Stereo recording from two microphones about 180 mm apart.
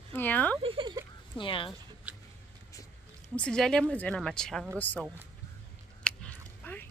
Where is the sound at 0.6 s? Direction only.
30° right (ahead or behind).